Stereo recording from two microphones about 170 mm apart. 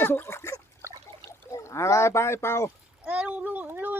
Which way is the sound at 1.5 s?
20° left (ahead or behind).